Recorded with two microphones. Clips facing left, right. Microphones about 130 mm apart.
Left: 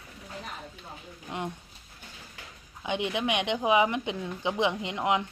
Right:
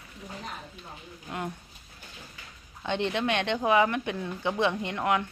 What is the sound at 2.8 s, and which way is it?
Speech, 10° left (ahead or behind).